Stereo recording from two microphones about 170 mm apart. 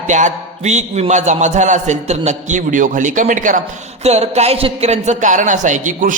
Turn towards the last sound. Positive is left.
turn(degrees=-50)  # may be behind; listen again after turning